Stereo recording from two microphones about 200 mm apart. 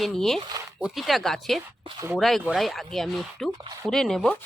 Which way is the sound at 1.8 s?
25° right (ahead or behind).